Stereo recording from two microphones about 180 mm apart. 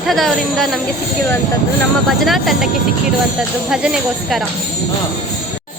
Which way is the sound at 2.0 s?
Centre (ahead or behind).